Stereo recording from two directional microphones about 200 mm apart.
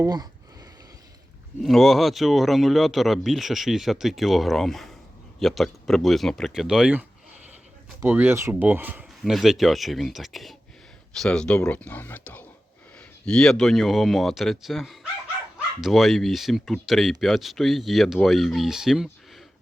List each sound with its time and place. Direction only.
0.0 s speech: 20° right (ahead or behind)
1.6 s speech: centre (ahead or behind)
8.0 s speech: 10° right (ahead or behind)